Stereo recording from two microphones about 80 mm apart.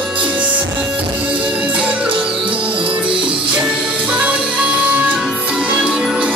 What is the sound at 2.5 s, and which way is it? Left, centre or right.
Music, right.